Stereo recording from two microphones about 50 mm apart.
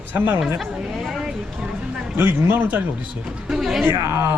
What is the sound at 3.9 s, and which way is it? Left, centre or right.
Speech, right.